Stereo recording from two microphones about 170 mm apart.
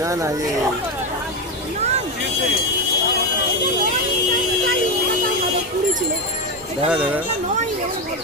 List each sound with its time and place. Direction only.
0.0 s speech: 20° right (ahead or behind)
6.8 s speech: 5° right (ahead or behind)